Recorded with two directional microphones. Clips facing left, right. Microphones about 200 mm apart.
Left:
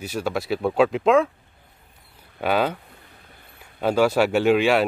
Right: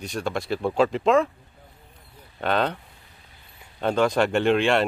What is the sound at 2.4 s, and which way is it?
Speech, 10° left (ahead or behind).